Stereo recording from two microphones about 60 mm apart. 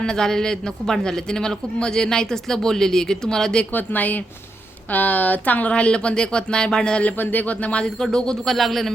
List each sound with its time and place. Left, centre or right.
0.0 s a man's voice: centre
3.7 s a man's voice: left; by 7.1 s centre
7.2 s a man's voice: left; by 8.9 s centre